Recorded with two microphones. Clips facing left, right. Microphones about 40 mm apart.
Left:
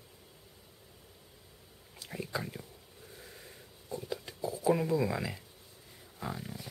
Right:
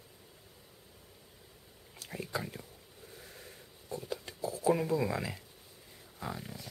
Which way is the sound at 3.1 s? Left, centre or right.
Centre.